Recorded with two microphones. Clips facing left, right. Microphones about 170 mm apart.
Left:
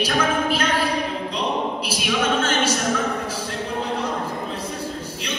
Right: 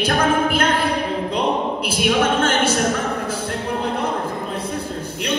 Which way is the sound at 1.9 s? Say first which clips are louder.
Right 6 dB; 55° right (ahead or behind).